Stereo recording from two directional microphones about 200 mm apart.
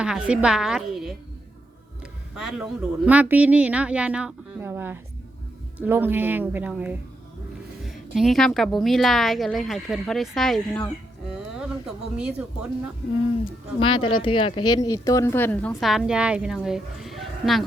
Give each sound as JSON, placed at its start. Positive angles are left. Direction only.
{"t": 0.0, "sound": "a woman's voice", "side_deg": -5}
{"t": 2.3, "sound": "a woman's voice", "side_deg": 0}
{"t": 13.7, "sound": "a woman's voice", "side_deg": 25}